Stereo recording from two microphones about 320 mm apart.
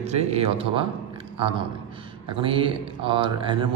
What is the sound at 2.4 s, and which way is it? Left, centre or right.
A man's voice, centre.